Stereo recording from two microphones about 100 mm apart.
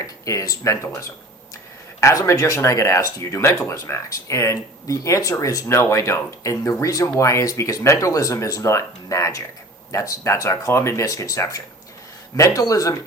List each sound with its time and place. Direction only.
0.3 s speech: 35° left (ahead or behind)